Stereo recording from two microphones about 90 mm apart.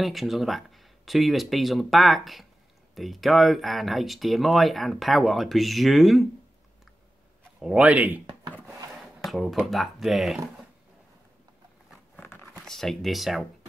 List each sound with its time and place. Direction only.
0.0 s speech: centre (ahead or behind)
7.6 s a man's voice: 15° right (ahead or behind)
9.2 s speech: centre (ahead or behind)
12.2 s a sound: 20° left (ahead or behind)
12.6 s speech: 5° left (ahead or behind)